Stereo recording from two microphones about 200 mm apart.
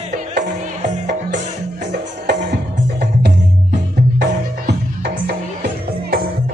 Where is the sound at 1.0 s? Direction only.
60° right (ahead or behind).